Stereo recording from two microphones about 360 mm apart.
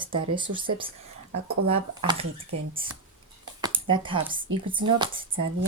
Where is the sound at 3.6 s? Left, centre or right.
Centre.